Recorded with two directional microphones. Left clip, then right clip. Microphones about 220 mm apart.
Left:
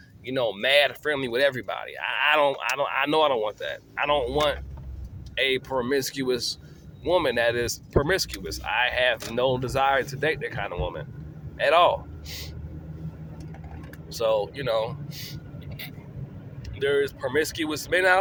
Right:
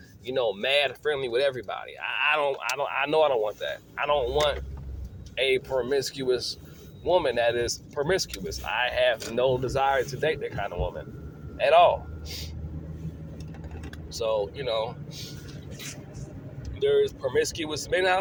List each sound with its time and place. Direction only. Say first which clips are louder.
0.3 s speech: left 2 dB; 30° left (ahead or behind)
14.2 s speech: left 3 dB; 30° left (ahead or behind)
16.8 s speech: right 1 dB; 25° left (ahead or behind)